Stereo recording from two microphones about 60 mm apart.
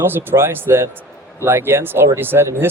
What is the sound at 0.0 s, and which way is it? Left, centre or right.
A man's voice, right.